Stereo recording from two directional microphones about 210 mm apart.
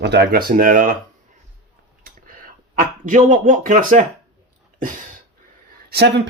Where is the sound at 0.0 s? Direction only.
50° right (ahead or behind).